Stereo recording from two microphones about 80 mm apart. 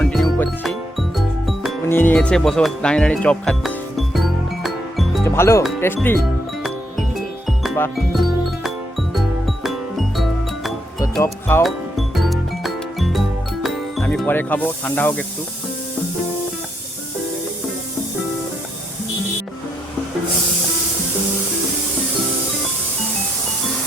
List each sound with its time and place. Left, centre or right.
0.1 s music: centre
1.9 s speech: left
2.3 s speech: centre
3.6 s music: centre
5.2 s speech: left
7.9 s music: centre
11.2 s speech: left
11.6 s music: centre
14.3 s speech: left